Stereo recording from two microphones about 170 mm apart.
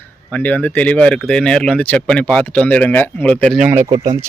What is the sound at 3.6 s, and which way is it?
Speech, 10° right (ahead or behind).